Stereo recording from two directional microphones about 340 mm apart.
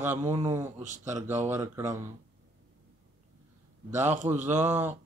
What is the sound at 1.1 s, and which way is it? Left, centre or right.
Speech, centre.